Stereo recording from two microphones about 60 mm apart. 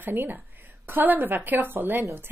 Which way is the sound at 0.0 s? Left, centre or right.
Right.